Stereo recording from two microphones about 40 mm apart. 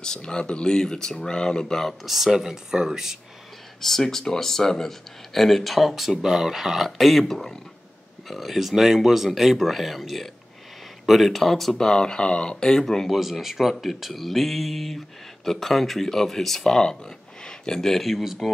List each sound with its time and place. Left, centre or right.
0.0 s speech: centre
2.0 s speech: centre
3.8 s speech: centre
7.2 s speech: centre
8.3 s speech: centre
11.8 s speech: centre
13.1 s speech: centre
18.0 s speech: centre